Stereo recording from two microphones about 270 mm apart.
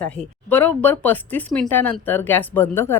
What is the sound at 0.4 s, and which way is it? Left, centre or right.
A woman's voice, centre.